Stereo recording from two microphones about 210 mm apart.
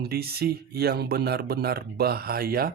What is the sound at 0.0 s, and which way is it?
Speech, 50° right (ahead or behind).